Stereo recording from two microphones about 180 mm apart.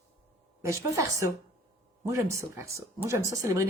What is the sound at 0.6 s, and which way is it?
Speech, 15° right (ahead or behind).